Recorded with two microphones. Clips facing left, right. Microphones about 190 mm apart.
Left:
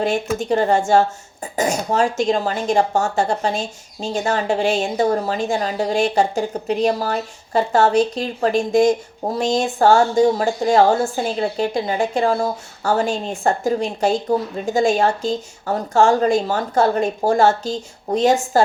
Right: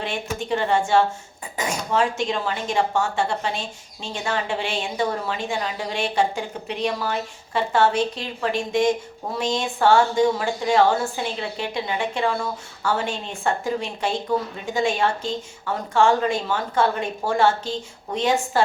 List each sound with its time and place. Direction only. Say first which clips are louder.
0.0 s speech: left 8 dB; 40° left (ahead or behind)